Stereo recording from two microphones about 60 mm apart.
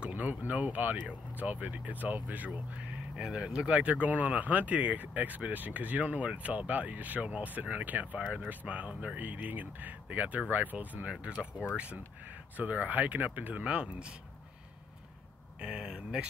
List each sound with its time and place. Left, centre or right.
0.1 s speech: right
3.2 s speech: centre
15.6 s speech: centre